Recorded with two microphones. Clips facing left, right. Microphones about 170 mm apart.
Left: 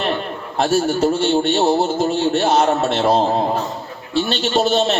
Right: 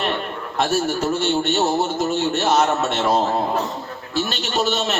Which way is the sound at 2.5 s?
35° left (ahead or behind).